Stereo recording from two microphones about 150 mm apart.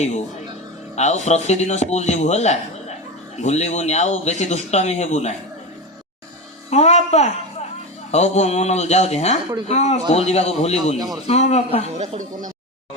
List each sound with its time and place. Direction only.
0.9 s speech: 50° left (ahead or behind)
6.7 s a woman's voice: 45° left (ahead or behind)
11.9 s speech: 55° right (ahead or behind)